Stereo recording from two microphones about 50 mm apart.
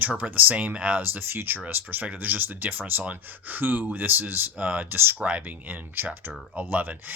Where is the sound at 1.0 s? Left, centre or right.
Right.